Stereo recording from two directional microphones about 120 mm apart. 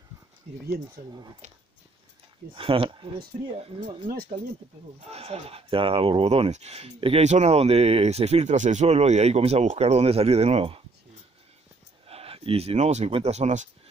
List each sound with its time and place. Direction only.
1.0 s speech: 90° right
1.4 s speech: 80° right
2.5 s speech: 50° right (ahead or behind)
5.1 s speech: 55° right (ahead or behind)
12.1 s speech: 55° right (ahead or behind); by 13.7 s 75° right (ahead or behind)